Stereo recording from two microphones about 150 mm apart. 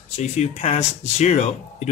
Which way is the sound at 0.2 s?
45° left (ahead or behind).